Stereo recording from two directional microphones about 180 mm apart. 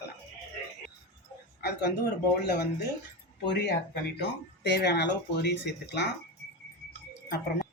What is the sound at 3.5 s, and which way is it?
A woman's voice, 65° left (ahead or behind).